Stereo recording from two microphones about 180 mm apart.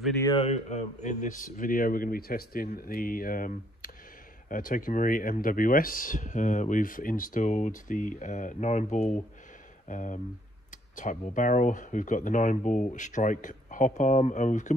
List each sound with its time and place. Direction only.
0.4 s speech: 40° left (ahead or behind)